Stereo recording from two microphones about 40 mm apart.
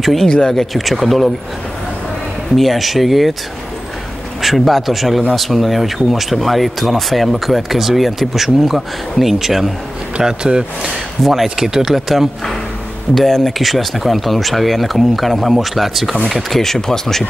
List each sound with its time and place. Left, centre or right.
0.2 s speech: centre
0.5 s speech: centre
2.5 s speech: centre
4.4 s speech: centre
10.2 s speech: right; by 12.3 s centre
13.1 s speech: centre